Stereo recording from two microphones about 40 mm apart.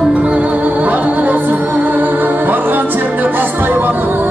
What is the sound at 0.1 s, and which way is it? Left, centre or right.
Music, right.